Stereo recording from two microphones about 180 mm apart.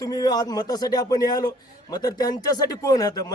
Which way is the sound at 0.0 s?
20° left (ahead or behind).